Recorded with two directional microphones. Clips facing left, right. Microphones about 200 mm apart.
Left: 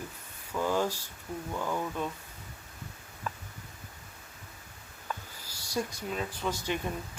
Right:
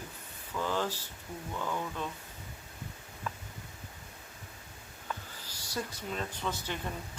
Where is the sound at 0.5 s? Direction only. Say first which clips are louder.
Left 4 dB; 10° left (ahead or behind).